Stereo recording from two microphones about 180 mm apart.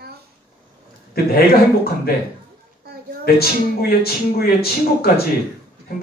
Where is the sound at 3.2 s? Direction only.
60° left (ahead or behind).